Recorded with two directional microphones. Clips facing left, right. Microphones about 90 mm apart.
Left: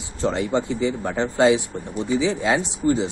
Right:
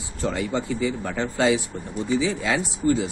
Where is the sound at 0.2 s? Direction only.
25° left (ahead or behind).